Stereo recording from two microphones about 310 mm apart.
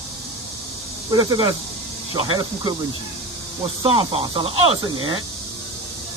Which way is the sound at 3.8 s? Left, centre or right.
Centre.